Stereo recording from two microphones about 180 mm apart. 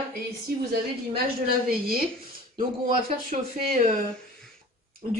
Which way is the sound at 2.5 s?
50° right (ahead or behind).